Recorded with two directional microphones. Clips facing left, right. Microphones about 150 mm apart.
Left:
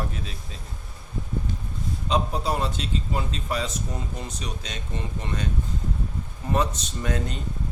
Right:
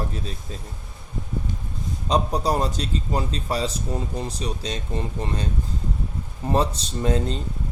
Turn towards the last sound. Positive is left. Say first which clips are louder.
# right 5 dB
turn(degrees=-30)  # may be behind; listen again after turning